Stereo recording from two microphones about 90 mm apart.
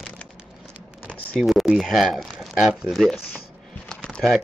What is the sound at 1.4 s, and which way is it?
Speech, centre (ahead or behind).